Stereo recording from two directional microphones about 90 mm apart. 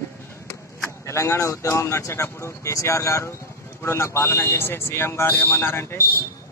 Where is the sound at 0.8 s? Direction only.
35° left (ahead or behind).